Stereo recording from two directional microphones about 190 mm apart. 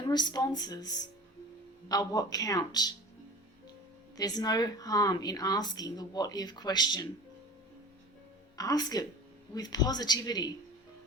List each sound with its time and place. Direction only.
0.0 s speech: 20° left (ahead or behind)
4.2 s speech: 20° left (ahead or behind)
8.5 s speech: 20° left (ahead or behind)